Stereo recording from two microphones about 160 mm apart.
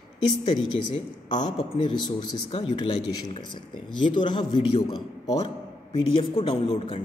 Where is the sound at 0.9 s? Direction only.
25° left (ahead or behind).